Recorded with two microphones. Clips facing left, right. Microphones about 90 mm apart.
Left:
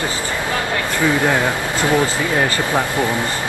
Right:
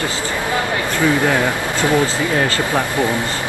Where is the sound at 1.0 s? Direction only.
20° left (ahead or behind).